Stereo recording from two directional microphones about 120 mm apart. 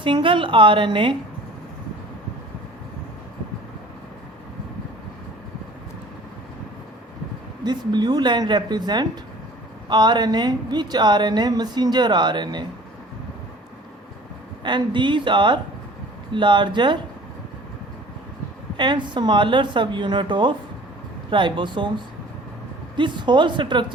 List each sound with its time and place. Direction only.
0.0 s a woman's voice: 45° right (ahead or behind)
7.6 s speech: 35° right (ahead or behind)
14.6 s speech: 40° right (ahead or behind)
18.8 s speech: 40° right (ahead or behind)